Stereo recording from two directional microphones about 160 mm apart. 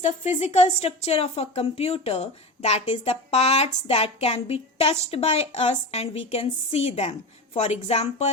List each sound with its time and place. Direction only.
0.0 s speech: 45° left (ahead or behind)